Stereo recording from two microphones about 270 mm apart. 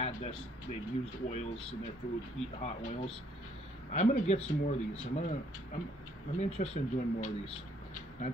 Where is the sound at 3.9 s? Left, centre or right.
Left.